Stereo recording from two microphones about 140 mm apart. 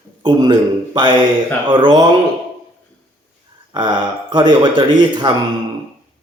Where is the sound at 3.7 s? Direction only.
35° right (ahead or behind).